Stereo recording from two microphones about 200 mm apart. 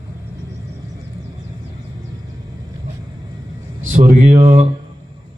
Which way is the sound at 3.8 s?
40° right (ahead or behind).